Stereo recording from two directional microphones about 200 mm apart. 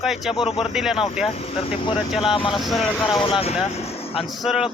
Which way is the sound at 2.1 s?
Centre (ahead or behind).